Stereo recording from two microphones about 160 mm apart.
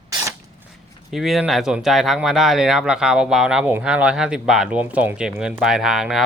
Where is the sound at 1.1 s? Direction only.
Centre (ahead or behind).